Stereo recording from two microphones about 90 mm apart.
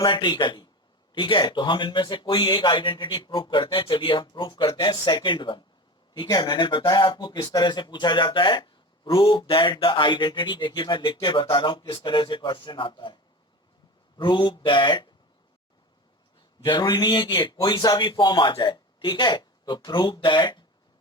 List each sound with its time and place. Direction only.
0.0 s speech: 65° left (ahead or behind)
7.3 s speech: 45° left (ahead or behind); by 13.1 s 65° left (ahead or behind)
14.2 s speech: 65° left (ahead or behind)
16.6 s speech: 55° left (ahead or behind)